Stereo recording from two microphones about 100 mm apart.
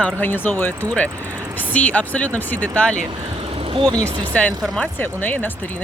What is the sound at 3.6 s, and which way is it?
Vehicle, 65° right (ahead or behind).